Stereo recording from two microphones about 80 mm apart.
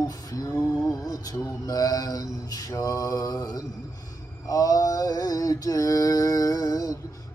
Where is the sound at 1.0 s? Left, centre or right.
Left.